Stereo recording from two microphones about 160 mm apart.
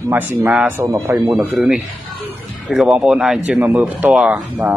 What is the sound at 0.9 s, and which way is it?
Speech, 20° right (ahead or behind).